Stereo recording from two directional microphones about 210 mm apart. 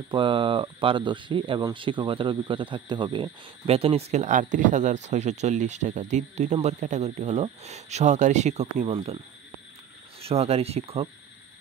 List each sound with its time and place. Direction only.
0.1 s speech: 25° right (ahead or behind)
10.2 s speech: 30° right (ahead or behind)